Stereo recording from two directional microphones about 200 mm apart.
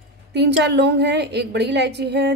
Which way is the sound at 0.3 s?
60° right (ahead or behind).